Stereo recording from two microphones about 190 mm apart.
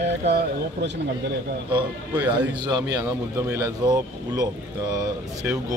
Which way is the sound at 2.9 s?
10° right (ahead or behind).